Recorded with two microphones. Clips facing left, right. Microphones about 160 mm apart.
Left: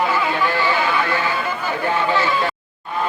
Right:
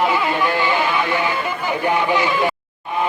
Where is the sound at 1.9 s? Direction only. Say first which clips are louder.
Right 1 dB; 15° right (ahead or behind).